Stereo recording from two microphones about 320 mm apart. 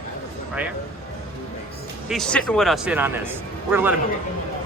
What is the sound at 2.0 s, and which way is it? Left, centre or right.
Speech, centre.